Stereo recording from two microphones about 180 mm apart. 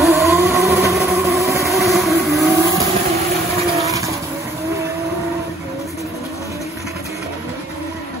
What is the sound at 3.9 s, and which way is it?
Vehicle, 15° right (ahead or behind).